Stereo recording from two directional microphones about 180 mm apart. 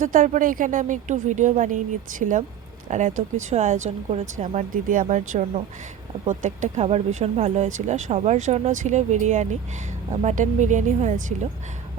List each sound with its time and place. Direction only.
0.0 s a woman's voice: 45° right (ahead or behind)